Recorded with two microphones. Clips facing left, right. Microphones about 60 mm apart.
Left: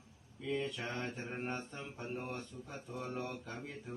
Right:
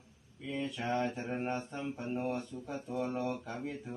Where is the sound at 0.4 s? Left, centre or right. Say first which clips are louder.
Right 2 dB; centre.